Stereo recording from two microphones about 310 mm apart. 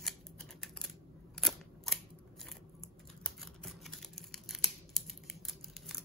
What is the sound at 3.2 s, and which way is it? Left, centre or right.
Scissors, centre.